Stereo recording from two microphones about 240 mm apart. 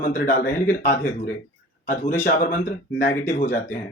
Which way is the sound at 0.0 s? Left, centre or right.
Left.